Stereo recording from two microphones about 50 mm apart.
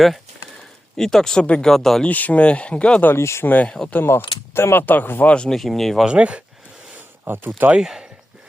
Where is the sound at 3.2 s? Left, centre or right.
Left.